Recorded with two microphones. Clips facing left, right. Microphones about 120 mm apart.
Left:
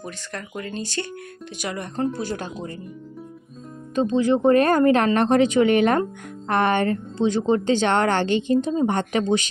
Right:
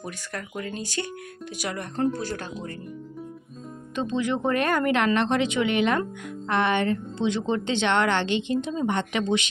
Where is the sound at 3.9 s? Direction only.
35° left (ahead or behind).